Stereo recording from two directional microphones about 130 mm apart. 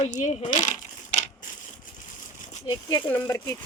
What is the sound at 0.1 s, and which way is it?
Speech, 70° left (ahead or behind).